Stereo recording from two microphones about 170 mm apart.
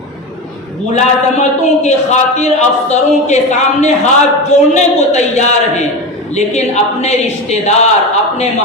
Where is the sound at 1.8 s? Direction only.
40° left (ahead or behind).